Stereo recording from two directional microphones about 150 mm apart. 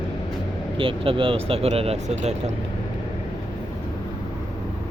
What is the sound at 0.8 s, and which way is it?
Speech, 35° right (ahead or behind).